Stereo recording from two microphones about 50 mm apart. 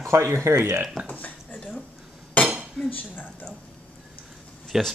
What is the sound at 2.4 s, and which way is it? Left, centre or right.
Cutlery, left.